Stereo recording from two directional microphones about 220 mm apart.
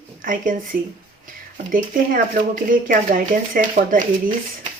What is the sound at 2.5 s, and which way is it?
Speech, 40° right (ahead or behind).